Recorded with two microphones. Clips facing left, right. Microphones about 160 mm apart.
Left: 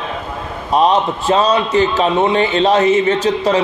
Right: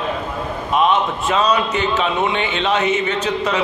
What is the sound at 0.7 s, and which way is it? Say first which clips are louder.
A man's voice: left 4 dB; 35° left (ahead or behind).